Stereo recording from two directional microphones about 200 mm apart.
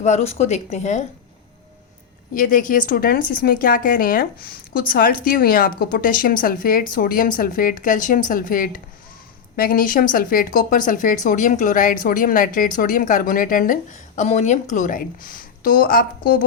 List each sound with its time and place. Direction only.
0.0 s speech: 35° left (ahead or behind)
2.3 s speech: 45° left (ahead or behind)